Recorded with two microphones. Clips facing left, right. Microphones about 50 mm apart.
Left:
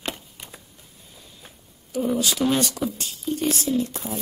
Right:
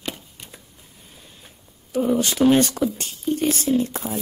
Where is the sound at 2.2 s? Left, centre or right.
Right.